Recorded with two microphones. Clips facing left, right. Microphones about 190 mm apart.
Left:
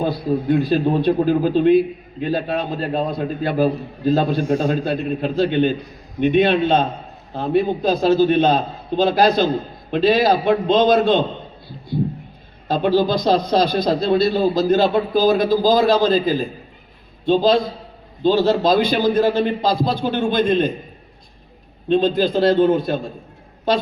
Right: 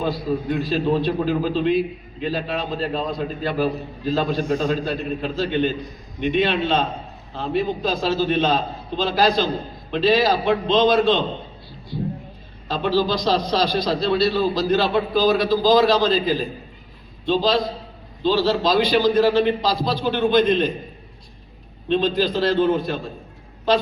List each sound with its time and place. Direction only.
0.5 s a man's voice: 55° left (ahead or behind)
12.6 s a man's voice: 50° left (ahead or behind)
21.8 s a man's voice: 50° left (ahead or behind)